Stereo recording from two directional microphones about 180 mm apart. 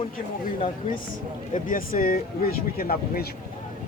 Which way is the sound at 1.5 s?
50° left (ahead or behind).